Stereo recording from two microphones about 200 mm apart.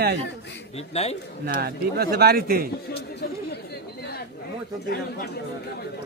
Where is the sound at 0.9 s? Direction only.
30° left (ahead or behind).